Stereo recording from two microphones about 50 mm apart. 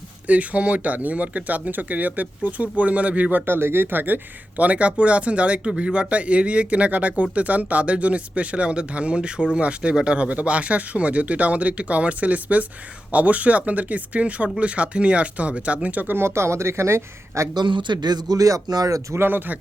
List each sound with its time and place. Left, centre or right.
0.3 s speech: right
3.4 s speech: right
16.1 s speech: right
19.1 s speech: right